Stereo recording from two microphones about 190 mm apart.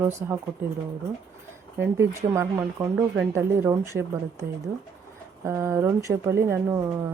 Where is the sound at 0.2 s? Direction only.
10° right (ahead or behind).